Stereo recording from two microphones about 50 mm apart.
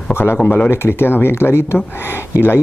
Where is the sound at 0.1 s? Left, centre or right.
Left.